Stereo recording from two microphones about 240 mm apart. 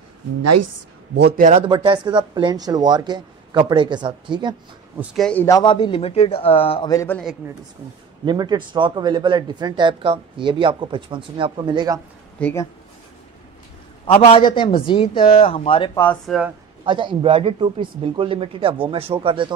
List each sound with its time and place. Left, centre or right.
0.4 s a woman's voice: right
1.1 s speech: right
1.7 s speech: centre
4.9 s a man's voice: centre
8.3 s speech: centre
12.4 s speech: centre
14.1 s a man's voice: left
16.0 s speech: centre
16.8 s speech: centre